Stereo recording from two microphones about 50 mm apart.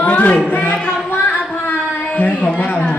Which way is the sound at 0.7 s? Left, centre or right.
Left.